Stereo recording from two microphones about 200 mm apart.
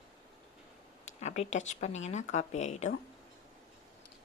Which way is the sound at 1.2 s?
35° left (ahead or behind).